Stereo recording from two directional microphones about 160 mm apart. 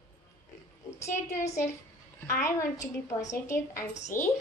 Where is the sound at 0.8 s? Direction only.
15° left (ahead or behind).